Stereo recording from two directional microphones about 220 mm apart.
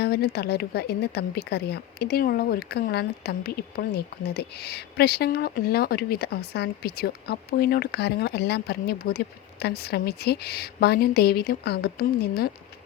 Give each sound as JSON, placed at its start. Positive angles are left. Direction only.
{"t": 0.0, "sound": "a woman's voice", "side_deg": 45}